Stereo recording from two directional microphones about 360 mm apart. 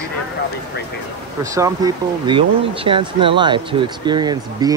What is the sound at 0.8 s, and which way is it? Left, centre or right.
Speech, left.